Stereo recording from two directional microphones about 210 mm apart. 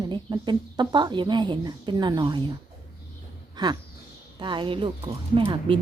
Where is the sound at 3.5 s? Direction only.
20° right (ahead or behind).